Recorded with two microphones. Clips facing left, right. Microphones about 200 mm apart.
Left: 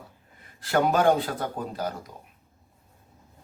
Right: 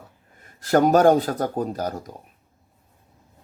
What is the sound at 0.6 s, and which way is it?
Speech, 45° right (ahead or behind).